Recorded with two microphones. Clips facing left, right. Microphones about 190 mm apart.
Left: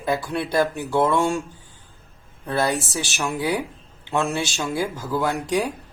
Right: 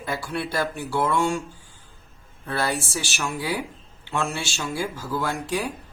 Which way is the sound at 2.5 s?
20° left (ahead or behind).